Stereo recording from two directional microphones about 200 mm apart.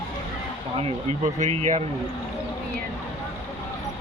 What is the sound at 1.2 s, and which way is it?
Speech, 35° right (ahead or behind).